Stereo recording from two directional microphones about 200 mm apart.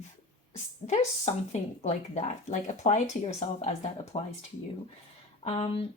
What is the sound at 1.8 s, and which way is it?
Speech, 35° left (ahead or behind).